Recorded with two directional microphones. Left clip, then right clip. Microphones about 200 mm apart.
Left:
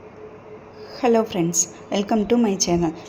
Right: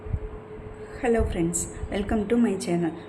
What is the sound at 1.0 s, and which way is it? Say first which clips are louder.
A woman's voice: left 5 dB; 20° left (ahead or behind).